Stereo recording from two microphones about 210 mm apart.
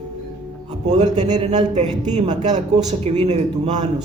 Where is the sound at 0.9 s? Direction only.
35° right (ahead or behind).